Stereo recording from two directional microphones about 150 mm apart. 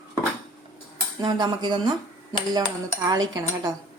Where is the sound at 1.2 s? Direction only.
30° right (ahead or behind).